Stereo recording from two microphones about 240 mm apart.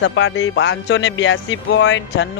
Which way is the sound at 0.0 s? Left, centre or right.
Left.